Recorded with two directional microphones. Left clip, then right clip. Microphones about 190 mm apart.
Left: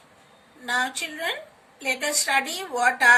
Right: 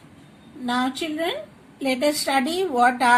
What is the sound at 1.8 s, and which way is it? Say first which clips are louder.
Speech: right 4 dB; 25° right (ahead or behind).